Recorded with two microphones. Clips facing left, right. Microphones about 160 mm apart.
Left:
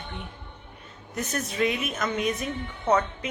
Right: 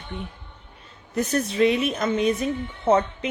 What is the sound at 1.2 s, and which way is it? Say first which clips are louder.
A woman's voice: right 6 dB; 30° right (ahead or behind).